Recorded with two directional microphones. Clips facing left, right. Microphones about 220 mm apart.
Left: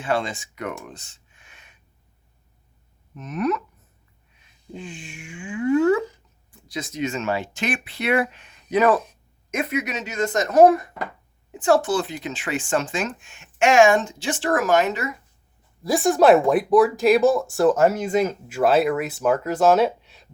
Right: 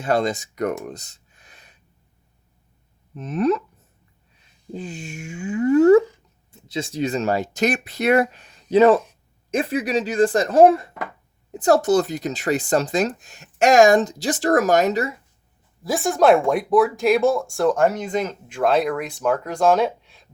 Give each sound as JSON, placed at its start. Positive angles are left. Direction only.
{"t": 0.0, "sound": "speech", "side_deg": -40}
{"t": 0.9, "sound": "a sound", "side_deg": -40}
{"t": 3.2, "sound": "a sound", "side_deg": -30}
{"t": 4.7, "sound": "speech", "side_deg": -40}
{"t": 6.5, "sound": "speech", "side_deg": -25}
{"t": 11.5, "sound": "speech", "side_deg": -40}
{"t": 15.8, "sound": "speech", "side_deg": 0}